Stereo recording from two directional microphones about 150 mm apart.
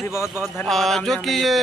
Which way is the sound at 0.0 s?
20° left (ahead or behind).